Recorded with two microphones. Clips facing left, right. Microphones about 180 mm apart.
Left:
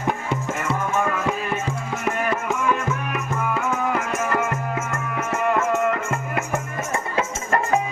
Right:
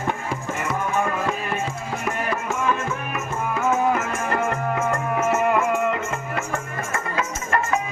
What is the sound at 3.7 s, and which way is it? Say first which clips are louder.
Music: right 2 dB; 25° right (ahead or behind).